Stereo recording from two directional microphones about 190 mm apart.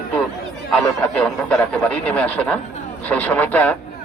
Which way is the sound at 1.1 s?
5° left (ahead or behind).